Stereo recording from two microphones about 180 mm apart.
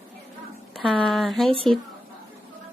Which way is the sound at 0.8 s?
Centre (ahead or behind).